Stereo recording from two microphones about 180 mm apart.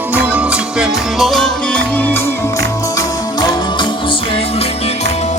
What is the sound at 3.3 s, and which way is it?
Music, 25° left (ahead or behind).